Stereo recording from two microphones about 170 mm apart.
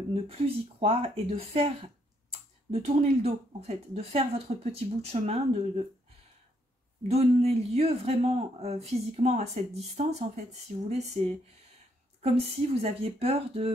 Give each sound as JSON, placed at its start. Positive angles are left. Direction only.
{"t": 0.1, "sound": "speech", "side_deg": -35}
{"t": 2.7, "sound": "speech", "side_deg": -40}
{"t": 7.0, "sound": "speech", "side_deg": -40}